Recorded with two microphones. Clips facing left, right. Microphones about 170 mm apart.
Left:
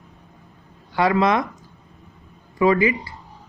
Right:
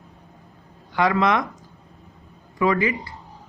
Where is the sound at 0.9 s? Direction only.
30° left (ahead or behind).